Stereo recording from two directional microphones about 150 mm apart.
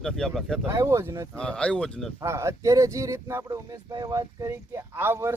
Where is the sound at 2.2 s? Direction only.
20° right (ahead or behind).